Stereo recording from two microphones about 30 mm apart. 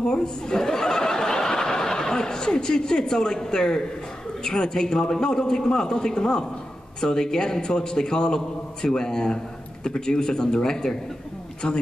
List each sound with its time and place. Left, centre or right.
0.0 s chuckle: left
4.5 s a man's voice: left
11.6 s a man's voice: left